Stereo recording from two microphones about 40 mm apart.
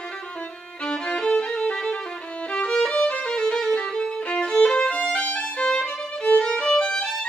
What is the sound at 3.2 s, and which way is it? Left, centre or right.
Violin, left.